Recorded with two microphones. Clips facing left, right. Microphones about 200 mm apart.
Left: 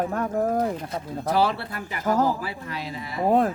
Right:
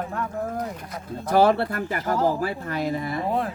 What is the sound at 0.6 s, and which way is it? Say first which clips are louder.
Speech: left 6 dB; 30° left (ahead or behind).